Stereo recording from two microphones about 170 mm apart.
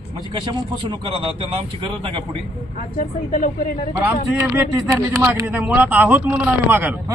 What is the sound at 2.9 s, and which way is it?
Speech, 55° left (ahead or behind).